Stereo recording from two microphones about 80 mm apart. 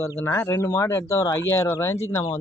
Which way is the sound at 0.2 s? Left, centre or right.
Left.